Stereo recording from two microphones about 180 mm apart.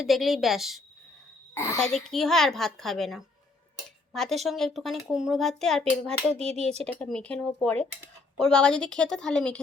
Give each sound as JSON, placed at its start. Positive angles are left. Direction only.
{"t": 0.0, "sound": "a woman's voice", "side_deg": 0}
{"t": 1.5, "sound": "a child's voice", "side_deg": 15}
{"t": 1.8, "sound": "a woman's voice", "side_deg": 0}
{"t": 6.5, "sound": "speech", "side_deg": -35}
{"t": 6.8, "sound": "a woman's voice", "side_deg": 5}